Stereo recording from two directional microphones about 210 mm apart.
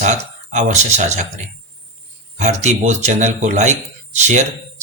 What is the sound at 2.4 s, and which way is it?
Speech, 35° right (ahead or behind).